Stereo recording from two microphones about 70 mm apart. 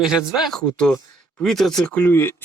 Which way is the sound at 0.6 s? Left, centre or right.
Centre.